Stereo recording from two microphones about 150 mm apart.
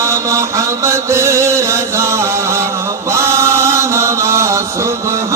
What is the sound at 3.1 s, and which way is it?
Chant, 20° right (ahead or behind).